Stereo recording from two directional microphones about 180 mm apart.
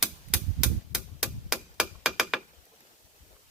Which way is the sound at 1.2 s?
5° right (ahead or behind).